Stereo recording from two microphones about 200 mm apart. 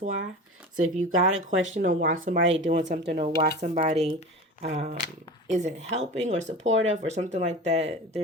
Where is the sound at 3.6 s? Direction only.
30° right (ahead or behind).